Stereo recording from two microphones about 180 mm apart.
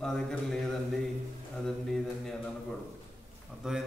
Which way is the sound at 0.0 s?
Centre (ahead or behind).